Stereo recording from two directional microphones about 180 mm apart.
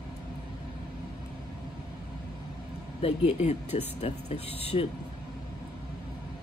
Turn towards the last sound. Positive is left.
turn(degrees=35)  # may be behind; listen again after turning